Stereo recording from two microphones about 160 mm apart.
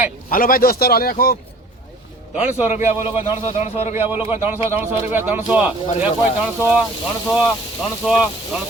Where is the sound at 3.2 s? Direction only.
45° left (ahead or behind).